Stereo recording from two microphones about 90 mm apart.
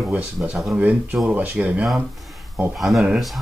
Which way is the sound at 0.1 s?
15° right (ahead or behind).